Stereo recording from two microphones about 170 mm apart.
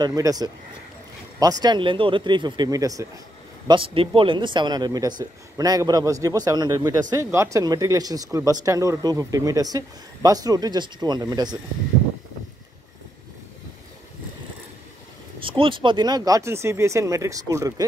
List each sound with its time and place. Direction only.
0.0 s speech: 20° right (ahead or behind)
3.6 s speech: 30° right (ahead or behind)
15.4 s speech: 30° right (ahead or behind)